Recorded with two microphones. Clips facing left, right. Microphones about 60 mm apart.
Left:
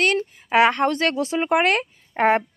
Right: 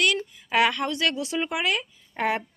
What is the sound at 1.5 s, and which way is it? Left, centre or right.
Speech, left.